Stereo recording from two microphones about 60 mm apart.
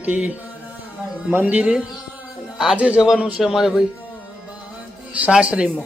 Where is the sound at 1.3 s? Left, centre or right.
Right.